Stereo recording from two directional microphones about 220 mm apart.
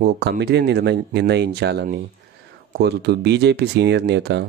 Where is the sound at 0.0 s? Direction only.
50° right (ahead or behind).